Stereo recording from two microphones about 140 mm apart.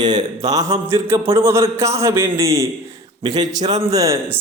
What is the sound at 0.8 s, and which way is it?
A man's voice, 20° right (ahead or behind).